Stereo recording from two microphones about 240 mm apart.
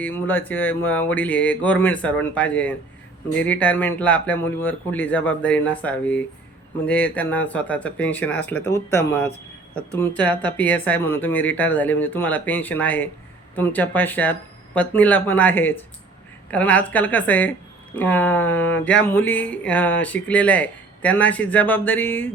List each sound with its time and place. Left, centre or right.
0.0 s speech: centre